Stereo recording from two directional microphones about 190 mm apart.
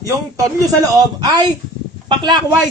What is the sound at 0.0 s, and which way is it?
A man's voice, 20° right (ahead or behind).